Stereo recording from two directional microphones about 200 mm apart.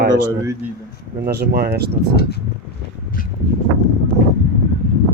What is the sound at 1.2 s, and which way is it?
Speech, 50° right (ahead or behind).